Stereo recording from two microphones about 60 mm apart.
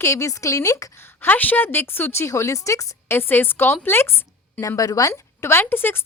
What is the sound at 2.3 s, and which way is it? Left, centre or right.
Speech, left.